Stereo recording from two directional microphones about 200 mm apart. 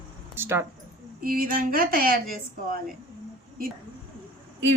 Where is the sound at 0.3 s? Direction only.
10° right (ahead or behind).